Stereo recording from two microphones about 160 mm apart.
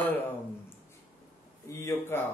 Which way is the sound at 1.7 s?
20° left (ahead or behind).